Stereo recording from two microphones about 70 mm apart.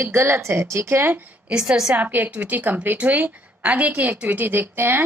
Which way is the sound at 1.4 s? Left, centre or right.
Centre.